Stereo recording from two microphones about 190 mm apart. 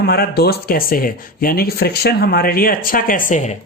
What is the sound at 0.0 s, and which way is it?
Speech, 55° left (ahead or behind).